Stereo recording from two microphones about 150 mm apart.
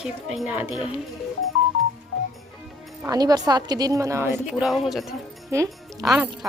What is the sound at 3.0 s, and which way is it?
A woman's voice, 25° right (ahead or behind).